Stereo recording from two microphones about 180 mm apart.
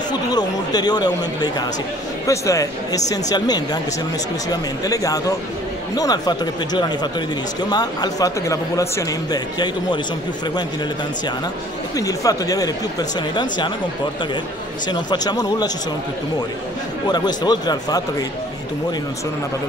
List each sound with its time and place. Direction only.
0.3 s a man's voice: 20° left (ahead or behind)
12.0 s speech: 20° left (ahead or behind)
14.9 s speech: 20° left (ahead or behind)
17.1 s speech: 20° left (ahead or behind)